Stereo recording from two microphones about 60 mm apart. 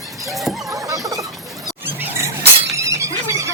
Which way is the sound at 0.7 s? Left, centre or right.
Right.